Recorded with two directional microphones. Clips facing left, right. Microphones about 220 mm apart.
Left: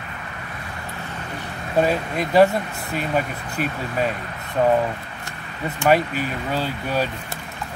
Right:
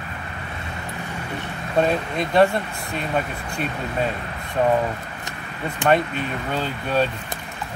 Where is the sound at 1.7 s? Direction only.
5° left (ahead or behind).